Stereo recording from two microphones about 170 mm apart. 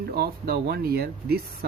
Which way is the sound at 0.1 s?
65° right (ahead or behind).